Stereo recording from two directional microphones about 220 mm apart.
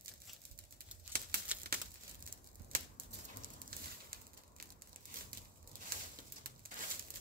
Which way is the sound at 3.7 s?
40° right (ahead or behind).